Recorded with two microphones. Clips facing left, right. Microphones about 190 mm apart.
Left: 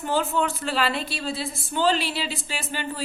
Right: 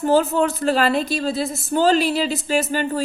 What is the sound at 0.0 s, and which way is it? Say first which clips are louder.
A woman's voice: right 7 dB; 40° right (ahead or behind).